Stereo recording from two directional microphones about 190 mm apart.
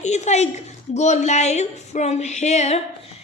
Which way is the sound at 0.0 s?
35° left (ahead or behind).